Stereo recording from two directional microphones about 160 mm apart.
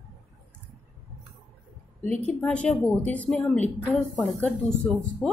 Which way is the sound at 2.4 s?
10° left (ahead or behind).